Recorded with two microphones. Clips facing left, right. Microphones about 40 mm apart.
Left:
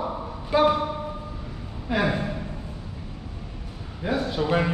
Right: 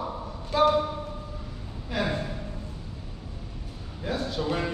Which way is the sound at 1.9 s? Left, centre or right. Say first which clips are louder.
Left 5 dB; centre.